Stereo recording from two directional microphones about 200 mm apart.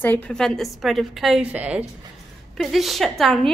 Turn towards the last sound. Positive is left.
turn(degrees=0)  # may be behind; listen again after turning